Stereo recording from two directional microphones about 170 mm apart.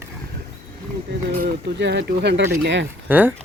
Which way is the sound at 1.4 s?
80° right.